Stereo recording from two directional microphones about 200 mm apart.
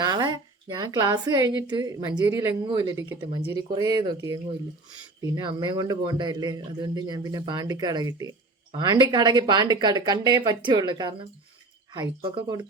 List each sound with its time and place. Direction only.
0.0 s a man's voice: 20° right (ahead or behind)